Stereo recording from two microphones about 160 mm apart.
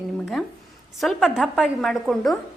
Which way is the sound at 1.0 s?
Centre (ahead or behind).